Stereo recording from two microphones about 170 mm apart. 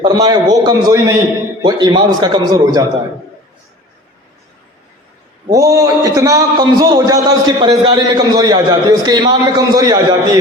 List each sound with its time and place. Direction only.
0.0 s a man's voice: 20° right (ahead or behind)
5.5 s a man's voice: 20° right (ahead or behind)